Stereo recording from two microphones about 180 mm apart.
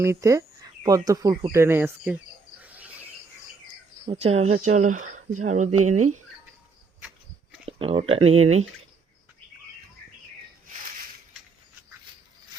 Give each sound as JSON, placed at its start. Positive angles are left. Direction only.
{"t": 0.0, "sound": "speech", "side_deg": -15}
{"t": 1.5, "sound": "insect", "side_deg": -15}
{"t": 4.0, "sound": "speech", "side_deg": -35}
{"t": 7.8, "sound": "speech", "side_deg": -35}